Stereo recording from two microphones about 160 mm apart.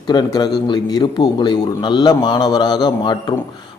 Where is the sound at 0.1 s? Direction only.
25° left (ahead or behind).